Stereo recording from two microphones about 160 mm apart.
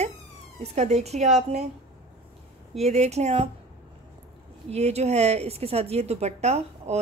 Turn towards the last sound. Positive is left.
turn(degrees=-45)  # may be behind; listen again after turning